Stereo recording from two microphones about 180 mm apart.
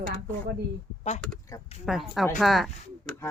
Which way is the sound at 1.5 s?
15° left (ahead or behind).